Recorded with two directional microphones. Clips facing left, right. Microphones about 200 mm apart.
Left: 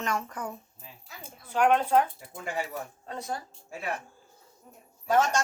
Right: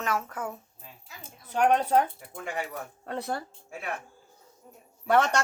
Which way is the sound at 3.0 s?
60° right (ahead or behind).